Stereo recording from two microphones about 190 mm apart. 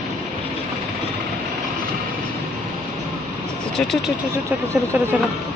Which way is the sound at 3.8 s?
Centre (ahead or behind).